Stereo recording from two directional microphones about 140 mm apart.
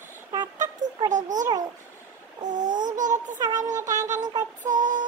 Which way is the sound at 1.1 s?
65° right (ahead or behind).